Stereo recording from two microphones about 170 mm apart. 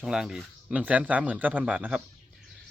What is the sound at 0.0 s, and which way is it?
Speech, 5° right (ahead or behind).